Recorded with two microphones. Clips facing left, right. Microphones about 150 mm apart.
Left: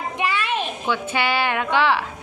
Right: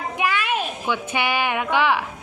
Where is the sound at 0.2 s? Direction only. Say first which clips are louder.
Right 1 dB; 10° right (ahead or behind).